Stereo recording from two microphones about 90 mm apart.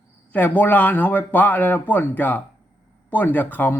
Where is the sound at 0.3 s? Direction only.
20° left (ahead or behind).